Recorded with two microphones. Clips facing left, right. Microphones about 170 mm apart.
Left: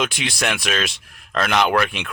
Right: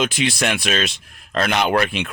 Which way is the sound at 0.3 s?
25° right (ahead or behind).